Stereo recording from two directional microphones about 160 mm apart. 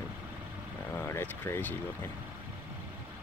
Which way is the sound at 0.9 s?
15° left (ahead or behind).